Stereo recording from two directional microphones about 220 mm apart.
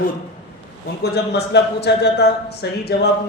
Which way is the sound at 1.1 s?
50° left (ahead or behind).